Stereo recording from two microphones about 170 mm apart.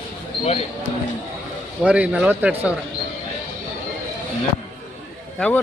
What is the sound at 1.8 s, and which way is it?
Speech, 5° right (ahead or behind).